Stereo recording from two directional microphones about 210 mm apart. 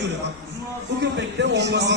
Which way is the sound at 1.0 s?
60° right (ahead or behind).